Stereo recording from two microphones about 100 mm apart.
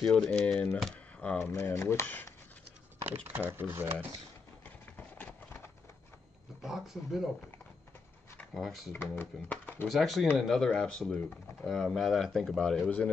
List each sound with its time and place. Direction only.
0.0 s speech: 5° left (ahead or behind)
1.4 s speech: 30° left (ahead or behind)
3.3 s speech: 20° right (ahead or behind)
4.6 s clip-clop: 15° left (ahead or behind)
6.6 s speech: 5° right (ahead or behind)
8.5 s speech: centre (ahead or behind)
8.9 s speech: 20° left (ahead or behind)
9.8 s speech: centre (ahead or behind)
12.8 s speech: 15° left (ahead or behind)